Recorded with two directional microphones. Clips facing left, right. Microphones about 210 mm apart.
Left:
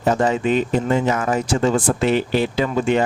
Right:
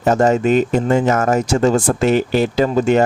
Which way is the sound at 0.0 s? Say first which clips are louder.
Right 4 dB; 45° right (ahead or behind).